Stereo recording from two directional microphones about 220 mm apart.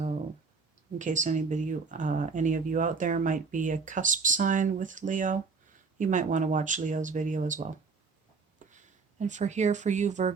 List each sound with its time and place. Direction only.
0.9 s speech: 35° right (ahead or behind)